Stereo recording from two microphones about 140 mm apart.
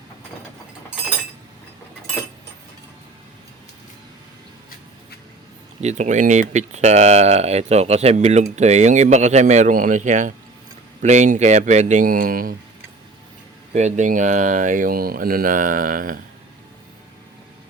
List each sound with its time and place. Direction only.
5.8 s speech: 55° right (ahead or behind); by 12.5 s 90° right
13.7 s speech: 55° right (ahead or behind); by 16.1 s 85° right